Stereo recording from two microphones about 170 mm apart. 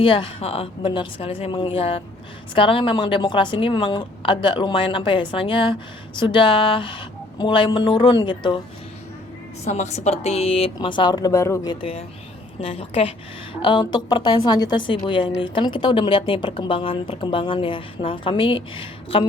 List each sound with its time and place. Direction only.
0.0 s a woman's voice: 30° left (ahead or behind)
9.6 s a woman's voice: 40° left (ahead or behind)